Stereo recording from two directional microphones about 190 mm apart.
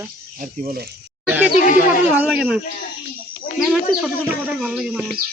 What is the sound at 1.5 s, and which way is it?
Speech, 40° left (ahead or behind).